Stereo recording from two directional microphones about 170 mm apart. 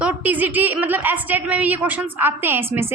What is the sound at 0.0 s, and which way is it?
A woman's voice, 10° right (ahead or behind).